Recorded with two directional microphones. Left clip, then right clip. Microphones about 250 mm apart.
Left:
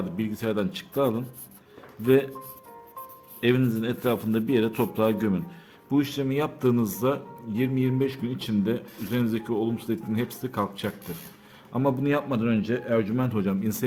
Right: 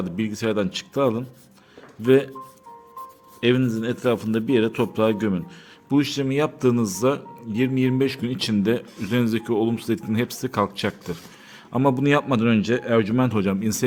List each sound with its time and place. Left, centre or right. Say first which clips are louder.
0.2 s a man's voice: right 5 dB; centre
3.4 s a man's voice: right 3 dB; centre